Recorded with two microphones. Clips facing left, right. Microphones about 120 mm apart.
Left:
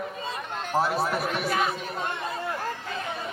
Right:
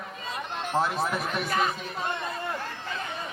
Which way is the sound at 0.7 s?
5° left (ahead or behind).